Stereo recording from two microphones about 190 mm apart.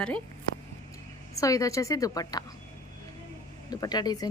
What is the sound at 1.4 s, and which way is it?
A woman's voice, 15° left (ahead or behind).